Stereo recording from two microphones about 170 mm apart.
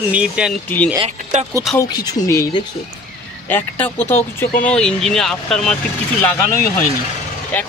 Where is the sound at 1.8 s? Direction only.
25° left (ahead or behind).